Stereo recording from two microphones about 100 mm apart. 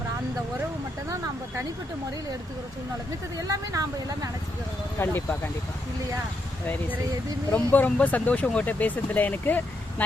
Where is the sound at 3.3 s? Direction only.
35° right (ahead or behind).